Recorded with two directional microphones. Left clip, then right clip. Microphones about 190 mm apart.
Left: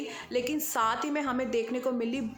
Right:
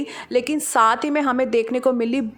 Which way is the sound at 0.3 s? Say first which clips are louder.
Right 11 dB; 45° right (ahead or behind).